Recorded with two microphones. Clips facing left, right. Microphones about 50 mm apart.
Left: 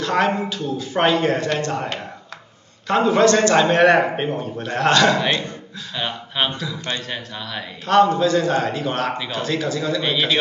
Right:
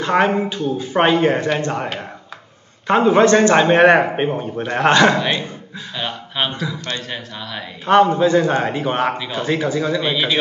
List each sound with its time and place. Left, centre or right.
0.0 s speech: right
2.9 s speech: right
5.9 s speech: centre
6.5 s a man's voice: centre
7.1 s speech: centre
7.8 s speech: right
10.0 s a man's voice: centre